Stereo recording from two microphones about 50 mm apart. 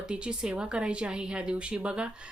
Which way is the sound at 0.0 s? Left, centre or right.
Centre.